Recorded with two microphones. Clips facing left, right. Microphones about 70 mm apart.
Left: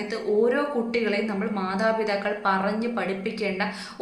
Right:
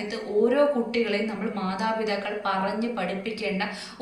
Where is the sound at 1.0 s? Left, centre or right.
Left.